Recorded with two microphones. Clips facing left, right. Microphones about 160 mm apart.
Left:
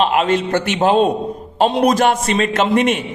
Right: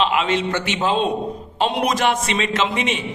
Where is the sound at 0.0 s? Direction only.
45° left (ahead or behind).